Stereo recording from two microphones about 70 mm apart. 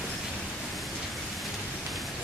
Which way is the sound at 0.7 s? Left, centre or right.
Centre.